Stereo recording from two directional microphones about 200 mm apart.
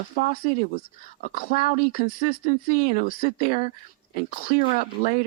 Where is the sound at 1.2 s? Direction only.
45° left (ahead or behind).